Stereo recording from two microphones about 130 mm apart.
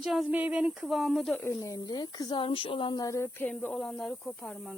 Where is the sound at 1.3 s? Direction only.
15° left (ahead or behind).